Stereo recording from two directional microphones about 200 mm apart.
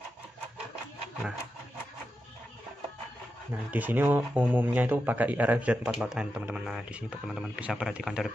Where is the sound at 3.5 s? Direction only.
10° right (ahead or behind).